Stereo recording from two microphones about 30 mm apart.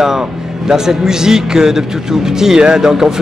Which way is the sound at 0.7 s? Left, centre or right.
Centre.